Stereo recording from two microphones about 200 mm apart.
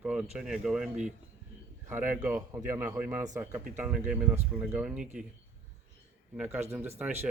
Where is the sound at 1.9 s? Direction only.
10° right (ahead or behind).